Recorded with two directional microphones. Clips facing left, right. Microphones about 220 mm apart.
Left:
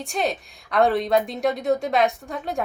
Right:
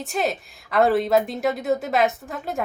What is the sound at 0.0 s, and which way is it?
Speech, centre (ahead or behind).